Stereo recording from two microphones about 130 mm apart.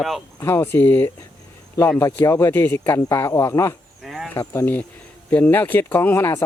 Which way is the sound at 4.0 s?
Centre (ahead or behind).